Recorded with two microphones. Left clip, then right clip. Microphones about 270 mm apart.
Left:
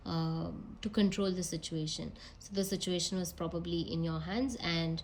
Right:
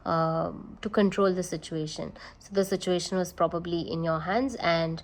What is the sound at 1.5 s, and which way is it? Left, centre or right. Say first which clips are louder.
Speech: right 5 dB; centre.